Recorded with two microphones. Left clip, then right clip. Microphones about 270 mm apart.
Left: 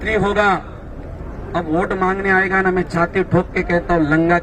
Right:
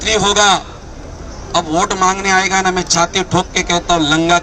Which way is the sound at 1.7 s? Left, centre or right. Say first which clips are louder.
Right 3 dB; right.